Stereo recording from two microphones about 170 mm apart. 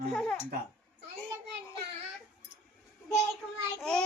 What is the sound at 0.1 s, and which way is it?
Speech, 5° left (ahead or behind).